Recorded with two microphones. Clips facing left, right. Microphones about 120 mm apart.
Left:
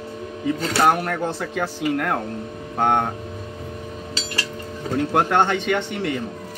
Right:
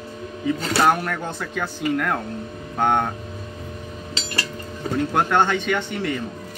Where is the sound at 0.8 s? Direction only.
30° left (ahead or behind).